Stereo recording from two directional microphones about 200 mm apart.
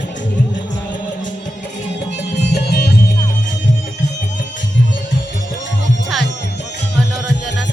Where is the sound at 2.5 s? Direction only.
55° left (ahead or behind).